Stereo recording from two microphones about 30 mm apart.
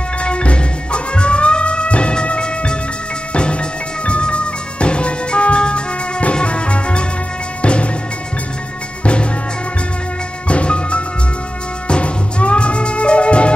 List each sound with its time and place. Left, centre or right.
0.2 s music: left
9.0 s music: left
10.5 s music: left